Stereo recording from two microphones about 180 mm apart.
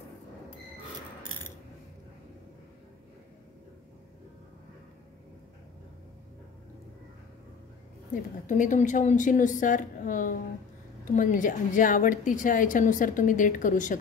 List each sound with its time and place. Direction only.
8.5 s a woman's voice: 45° left (ahead or behind)